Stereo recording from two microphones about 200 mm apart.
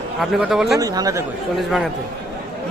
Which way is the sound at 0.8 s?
15° right (ahead or behind).